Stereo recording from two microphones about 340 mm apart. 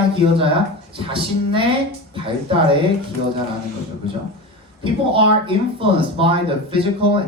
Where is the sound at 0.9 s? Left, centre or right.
Centre.